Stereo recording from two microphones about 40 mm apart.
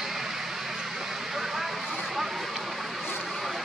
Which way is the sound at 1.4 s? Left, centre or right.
Centre.